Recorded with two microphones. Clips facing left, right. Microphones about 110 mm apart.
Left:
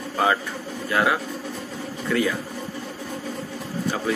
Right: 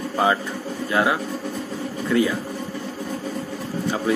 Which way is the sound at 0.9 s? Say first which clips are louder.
Right 1 dB; 25° right (ahead or behind).